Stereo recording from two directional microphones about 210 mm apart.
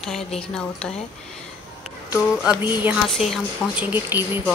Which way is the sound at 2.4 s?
5° right (ahead or behind).